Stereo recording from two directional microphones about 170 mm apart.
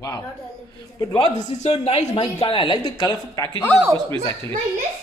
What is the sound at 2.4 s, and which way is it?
Speech, 30° left (ahead or behind).